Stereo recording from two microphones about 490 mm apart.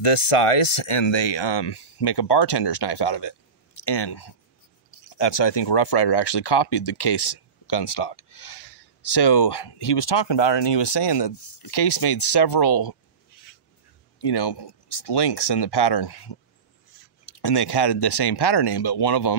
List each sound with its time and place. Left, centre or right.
0.0 s speech: left
14.2 s speech: left
17.4 s speech: left